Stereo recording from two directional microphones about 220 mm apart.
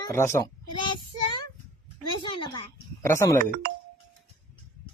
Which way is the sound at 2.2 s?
20° left (ahead or behind).